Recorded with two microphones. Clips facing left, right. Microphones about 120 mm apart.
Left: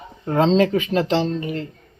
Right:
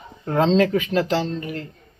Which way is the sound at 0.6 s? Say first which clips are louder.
Left 1 dB; 25° left (ahead or behind).